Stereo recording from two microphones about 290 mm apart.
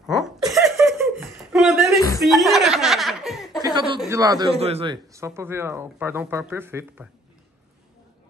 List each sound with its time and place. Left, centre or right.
0.0 s laughter: centre
1.5 s chuckle: centre
3.6 s a sound: centre
4.0 s a man's voice: centre